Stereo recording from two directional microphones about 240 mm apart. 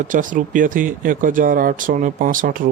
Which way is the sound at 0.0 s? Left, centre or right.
Right.